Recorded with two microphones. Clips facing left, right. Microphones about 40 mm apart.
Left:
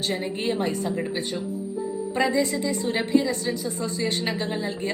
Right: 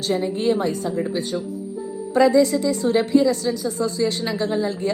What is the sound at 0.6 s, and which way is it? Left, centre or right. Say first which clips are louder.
A woman's voice: right 3 dB; left.